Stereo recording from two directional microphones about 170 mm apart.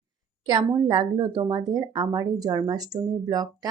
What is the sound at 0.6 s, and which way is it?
Speech, 25° right (ahead or behind).